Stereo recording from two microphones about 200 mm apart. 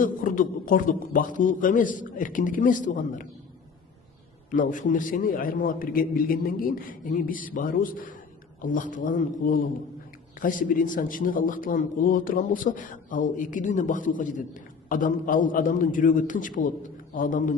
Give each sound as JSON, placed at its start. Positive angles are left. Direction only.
{"t": 0.0, "sound": "a man's voice", "side_deg": 40}
{"t": 4.5, "sound": "a man's voice", "side_deg": 40}